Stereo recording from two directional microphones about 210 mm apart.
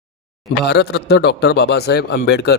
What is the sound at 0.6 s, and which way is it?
A man's voice, 50° left (ahead or behind).